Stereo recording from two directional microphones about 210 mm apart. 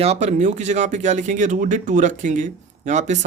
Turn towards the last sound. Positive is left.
turn(degrees=-35)  # may be behind; listen again after turning